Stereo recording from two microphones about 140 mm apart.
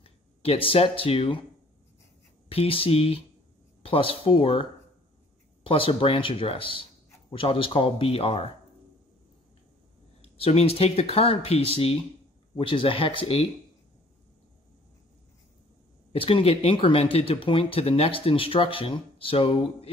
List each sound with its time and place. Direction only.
0.0 s speech: 40° left (ahead or behind)
2.5 s speech: 40° left (ahead or behind)
10.2 s speech: 45° left (ahead or behind)
16.1 s speech: 40° left (ahead or behind)